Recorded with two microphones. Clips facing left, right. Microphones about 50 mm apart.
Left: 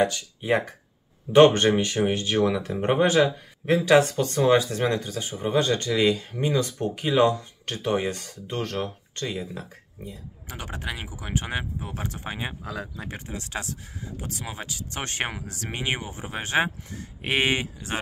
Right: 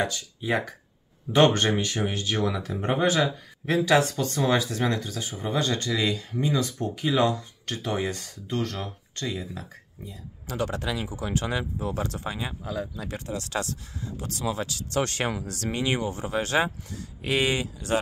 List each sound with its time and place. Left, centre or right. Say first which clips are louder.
0.0 s speech: left 4 dB; left
10.5 s speech: right 5 dB; left
12.6 s speech: right 2 dB; left
13.1 s speech: right 4 dB; centre; by 17.9 s left